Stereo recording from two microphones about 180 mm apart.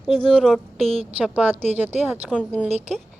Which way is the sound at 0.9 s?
35° right (ahead or behind).